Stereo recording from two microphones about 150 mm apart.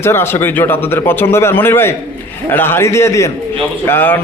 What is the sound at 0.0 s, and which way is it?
A man's voice, 15° left (ahead or behind).